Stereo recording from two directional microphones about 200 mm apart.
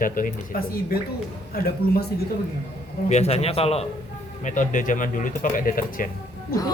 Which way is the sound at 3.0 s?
35° left (ahead or behind).